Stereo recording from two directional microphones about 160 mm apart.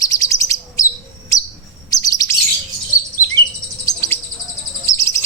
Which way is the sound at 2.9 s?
20° left (ahead or behind).